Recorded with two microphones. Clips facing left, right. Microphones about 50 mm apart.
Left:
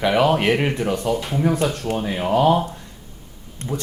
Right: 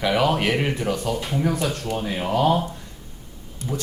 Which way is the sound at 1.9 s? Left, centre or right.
Left.